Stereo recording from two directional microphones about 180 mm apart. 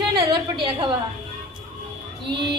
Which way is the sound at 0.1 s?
25° right (ahead or behind).